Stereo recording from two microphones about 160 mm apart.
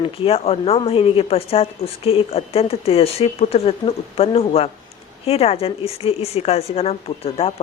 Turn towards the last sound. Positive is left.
turn(degrees=40)  # may be behind; listen again after turning